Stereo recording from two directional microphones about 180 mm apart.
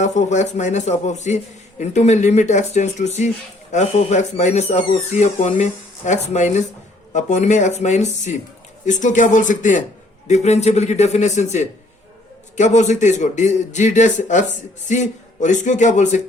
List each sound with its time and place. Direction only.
0.0 s a man's voice: 40° left (ahead or behind)